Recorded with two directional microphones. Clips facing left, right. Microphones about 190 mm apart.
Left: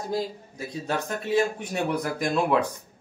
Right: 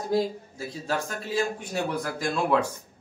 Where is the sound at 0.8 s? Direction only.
20° left (ahead or behind).